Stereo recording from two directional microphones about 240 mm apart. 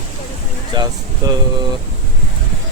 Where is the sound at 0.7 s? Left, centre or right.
Centre.